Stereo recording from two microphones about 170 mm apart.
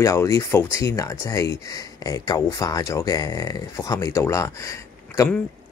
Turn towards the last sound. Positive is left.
turn(degrees=20)  # may be behind; listen again after turning